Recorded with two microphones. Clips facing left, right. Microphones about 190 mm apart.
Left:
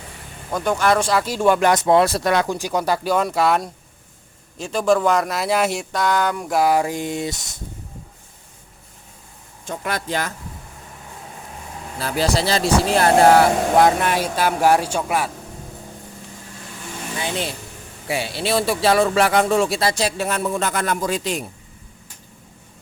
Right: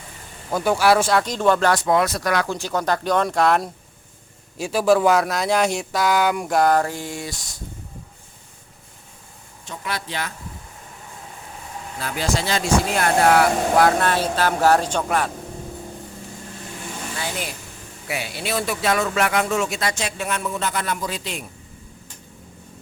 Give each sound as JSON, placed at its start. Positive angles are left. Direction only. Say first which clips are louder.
{"t": 0.5, "sound": "speech", "louder": "right 1 dB", "side_deg": -5}
{"t": 6.5, "sound": "speech", "louder": "left 2 dB", "side_deg": 5}
{"t": 9.6, "sound": "speech", "louder": "left 4 dB", "side_deg": 50}
{"t": 11.9, "sound": "speech", "louder": "left 4 dB", "side_deg": 35}
{"t": 17.2, "sound": "speech", "louder": "left 6 dB", "side_deg": 20}